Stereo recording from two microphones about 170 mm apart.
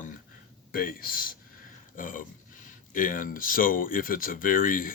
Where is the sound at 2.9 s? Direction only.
55° left (ahead or behind).